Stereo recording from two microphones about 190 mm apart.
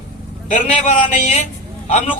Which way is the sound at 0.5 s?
35° left (ahead or behind).